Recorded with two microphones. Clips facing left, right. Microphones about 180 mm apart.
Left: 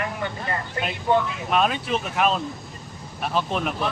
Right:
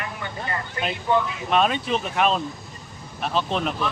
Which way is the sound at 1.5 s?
5° left (ahead or behind).